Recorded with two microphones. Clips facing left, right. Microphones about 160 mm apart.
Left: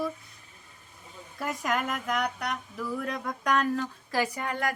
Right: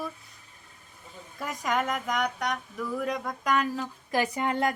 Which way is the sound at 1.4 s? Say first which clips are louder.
Right 1 dB; centre (ahead or behind).